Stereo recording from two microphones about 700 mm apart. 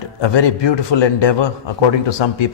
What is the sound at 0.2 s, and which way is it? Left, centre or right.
A man's voice, left.